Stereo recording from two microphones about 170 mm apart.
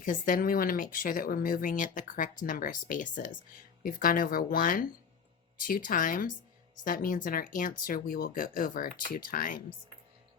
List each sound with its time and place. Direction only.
0.0 s speech: 50° left (ahead or behind)